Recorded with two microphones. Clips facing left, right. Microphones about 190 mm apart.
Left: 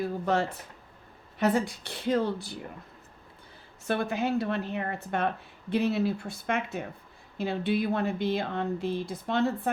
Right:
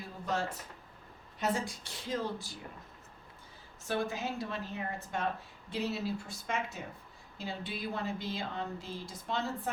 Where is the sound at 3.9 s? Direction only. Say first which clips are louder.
Left 7 dB; 60° left (ahead or behind).